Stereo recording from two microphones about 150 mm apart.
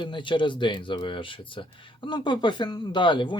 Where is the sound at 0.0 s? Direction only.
35° left (ahead or behind).